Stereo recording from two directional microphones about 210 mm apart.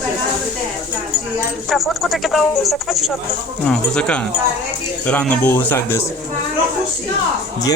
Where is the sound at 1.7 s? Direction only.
Centre (ahead or behind).